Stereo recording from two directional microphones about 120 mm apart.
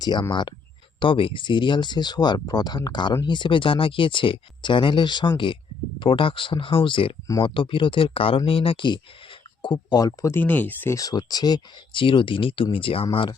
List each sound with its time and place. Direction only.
0.0 s speech: 35° left (ahead or behind); by 10.9 s 15° left (ahead or behind)
10.9 s speech: 30° left (ahead or behind)
12.0 s speech: 45° left (ahead or behind)